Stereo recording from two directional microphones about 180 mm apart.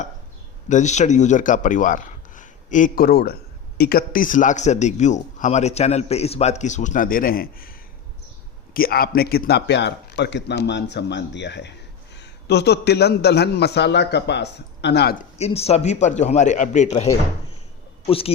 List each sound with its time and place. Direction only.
0.7 s a man's voice: 40° left (ahead or behind)
8.7 s speech: 55° left (ahead or behind)
15.4 s a man's voice: 35° left (ahead or behind)